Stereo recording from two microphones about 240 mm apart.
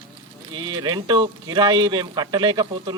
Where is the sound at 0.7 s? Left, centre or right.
Centre.